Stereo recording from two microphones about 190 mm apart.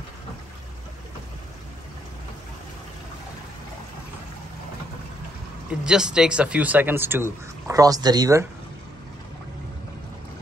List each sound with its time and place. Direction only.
5.7 s speech: 5° right (ahead or behind)